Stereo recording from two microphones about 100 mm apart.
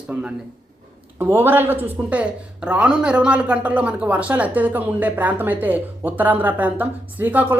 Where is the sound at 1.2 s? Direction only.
20° right (ahead or behind).